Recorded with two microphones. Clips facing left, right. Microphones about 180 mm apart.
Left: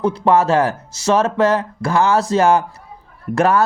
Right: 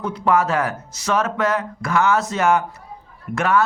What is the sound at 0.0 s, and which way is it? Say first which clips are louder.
Speech: left 4 dB; 30° left (ahead or behind).